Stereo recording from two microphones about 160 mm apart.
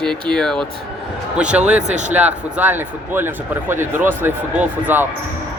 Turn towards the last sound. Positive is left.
turn(degrees=-10)  # may be behind; listen again after turning